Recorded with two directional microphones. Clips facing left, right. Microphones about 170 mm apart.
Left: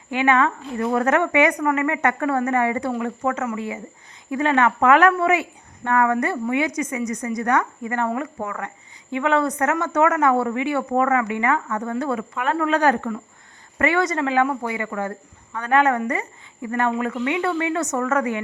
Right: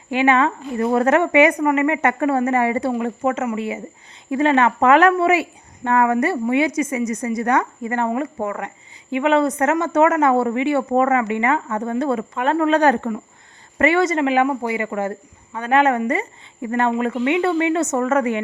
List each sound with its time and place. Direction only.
0.1 s speech: 20° right (ahead or behind)